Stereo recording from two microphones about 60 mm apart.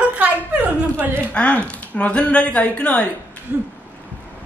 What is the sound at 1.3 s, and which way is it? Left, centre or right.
Speech, left.